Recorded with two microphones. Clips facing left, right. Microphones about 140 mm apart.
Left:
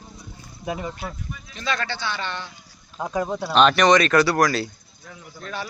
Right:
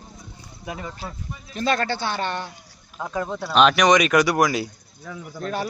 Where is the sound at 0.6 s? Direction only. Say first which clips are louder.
Left 4 dB; 20° left (ahead or behind).